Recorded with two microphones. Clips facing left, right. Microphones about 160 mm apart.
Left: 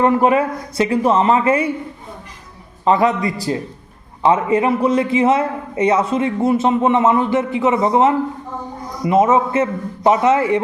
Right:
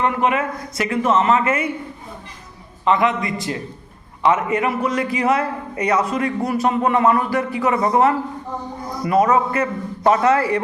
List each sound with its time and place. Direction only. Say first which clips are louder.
0.0 s speech: left 5 dB; 35° left (ahead or behind)
2.8 s a man's voice: left 3 dB; 35° left (ahead or behind); by 10.6 s 20° left (ahead or behind)